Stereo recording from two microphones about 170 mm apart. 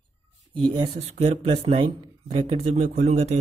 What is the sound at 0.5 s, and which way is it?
Speech, 30° right (ahead or behind).